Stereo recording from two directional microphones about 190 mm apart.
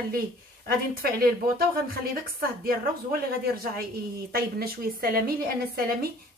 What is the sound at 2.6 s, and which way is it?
Speech, 50° right (ahead or behind).